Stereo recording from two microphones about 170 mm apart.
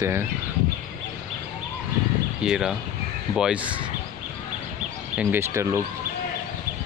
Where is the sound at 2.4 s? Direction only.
5° right (ahead or behind).